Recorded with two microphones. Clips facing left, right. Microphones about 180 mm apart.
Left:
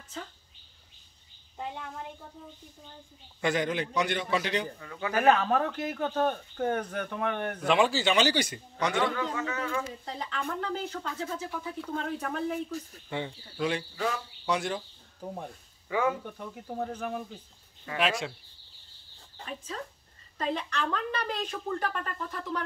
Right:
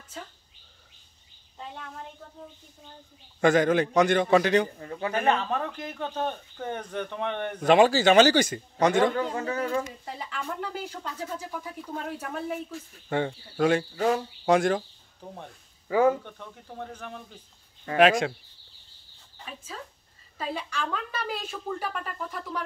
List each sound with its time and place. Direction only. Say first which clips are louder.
3.3 s a man's voice: right 8 dB; 45° right (ahead or behind)
5.1 s speech: left 3 dB; 5° left (ahead or behind)
7.6 s a man's voice: right 7 dB; 45° right (ahead or behind)
10.0 s a woman's voice: even; 10° right (ahead or behind)
13.1 s a man's voice: right 7 dB; 50° right (ahead or behind)
15.9 s speech: right 6 dB; 40° right (ahead or behind)
16.5 s speech: left 6 dB; 5° left (ahead or behind)
17.8 s a man's voice: right 9 dB; 50° right (ahead or behind)
20.3 s a woman's voice: left 1 dB; 10° right (ahead or behind)